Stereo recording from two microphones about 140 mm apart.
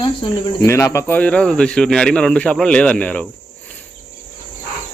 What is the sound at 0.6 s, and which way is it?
Speech, 20° left (ahead or behind).